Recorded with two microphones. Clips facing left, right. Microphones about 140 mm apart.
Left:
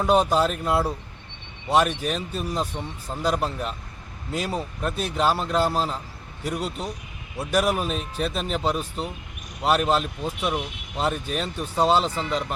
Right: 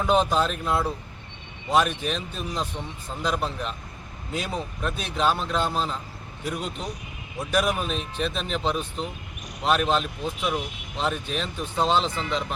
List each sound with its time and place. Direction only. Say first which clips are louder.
0.0 s speech: left 2 dB; 10° left (ahead or behind)
6.5 s a man's voice: left 3 dB; 35° left (ahead or behind)
7.3 s speech: left 2 dB; 10° left (ahead or behind)